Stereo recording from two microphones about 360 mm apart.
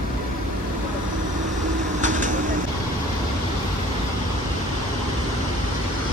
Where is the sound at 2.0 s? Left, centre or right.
Right.